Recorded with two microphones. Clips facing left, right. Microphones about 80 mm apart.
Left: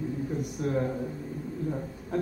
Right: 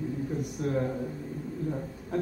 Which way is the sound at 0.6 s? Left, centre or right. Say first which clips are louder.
Left 1 dB; centre.